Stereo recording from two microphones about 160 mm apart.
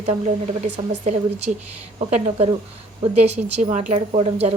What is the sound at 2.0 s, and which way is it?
A woman's voice, 45° right (ahead or behind).